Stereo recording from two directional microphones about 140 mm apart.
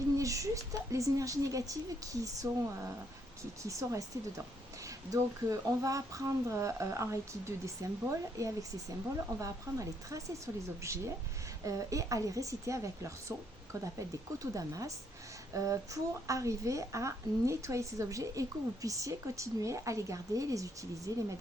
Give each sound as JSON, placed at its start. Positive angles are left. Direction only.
{"t": 0.2, "sound": "a woman's voice", "side_deg": -25}
{"t": 14.3, "sound": "a woman's voice", "side_deg": -25}